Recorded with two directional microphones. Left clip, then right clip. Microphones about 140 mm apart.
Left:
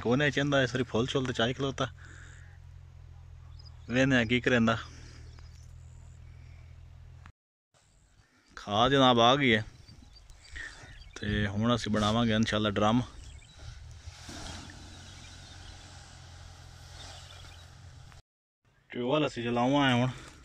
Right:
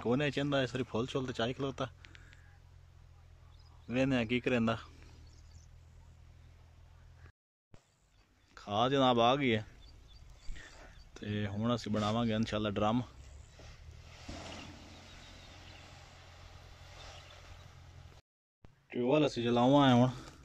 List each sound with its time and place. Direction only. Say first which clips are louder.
0.0 s speech: left 5 dB; 5° right (ahead or behind)
3.9 s speech: left 6 dB; 5° right (ahead or behind)
8.5 s speech: left 6 dB; centre (ahead or behind)
14.2 s turkey: left 3 dB; 5° right (ahead or behind)
15.2 s vehicle: left 4 dB; 5° right (ahead or behind)
18.9 s speech: left 1 dB; 15° right (ahead or behind)